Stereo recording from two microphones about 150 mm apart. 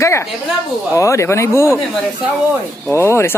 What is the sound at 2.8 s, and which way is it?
Speech, 15° left (ahead or behind).